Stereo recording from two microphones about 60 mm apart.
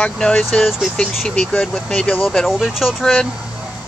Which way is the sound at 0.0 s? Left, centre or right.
Centre.